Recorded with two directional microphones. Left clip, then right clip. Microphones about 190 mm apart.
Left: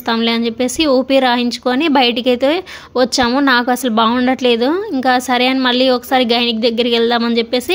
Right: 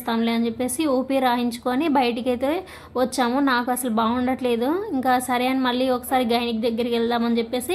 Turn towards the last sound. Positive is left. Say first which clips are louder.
# left 8 dB
turn(degrees=20)  # may be behind; listen again after turning